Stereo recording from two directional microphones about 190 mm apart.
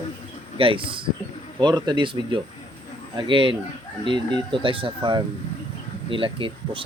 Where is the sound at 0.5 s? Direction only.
25° right (ahead or behind).